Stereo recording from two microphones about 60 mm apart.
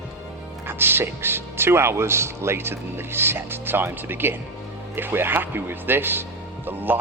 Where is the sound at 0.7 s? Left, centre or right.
Right.